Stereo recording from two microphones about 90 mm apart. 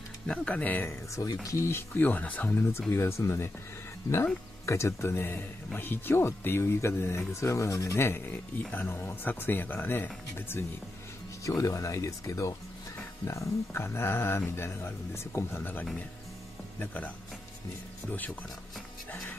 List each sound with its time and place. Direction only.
0.3 s speech: 15° left (ahead or behind)
1.1 s speech: 40° left (ahead or behind)
4.6 s speech: 30° left (ahead or behind)
11.4 s speech: 40° left (ahead or behind); by 17.1 s 15° left (ahead or behind)
18.1 s speech: 20° left (ahead or behind)